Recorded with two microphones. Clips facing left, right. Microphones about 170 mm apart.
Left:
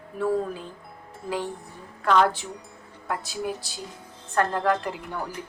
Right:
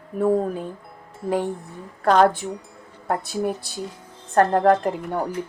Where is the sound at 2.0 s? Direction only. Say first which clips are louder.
Right 4 dB; 40° right (ahead or behind); by 3.8 s 55° right (ahead or behind).